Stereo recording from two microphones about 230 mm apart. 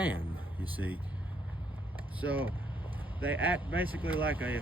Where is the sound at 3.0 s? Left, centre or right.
Centre.